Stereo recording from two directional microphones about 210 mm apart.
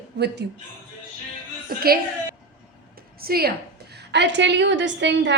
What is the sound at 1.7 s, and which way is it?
Speech, 45° right (ahead or behind).